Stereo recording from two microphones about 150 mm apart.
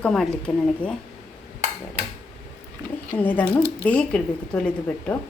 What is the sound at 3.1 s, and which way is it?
A woman's voice, 10° left (ahead or behind).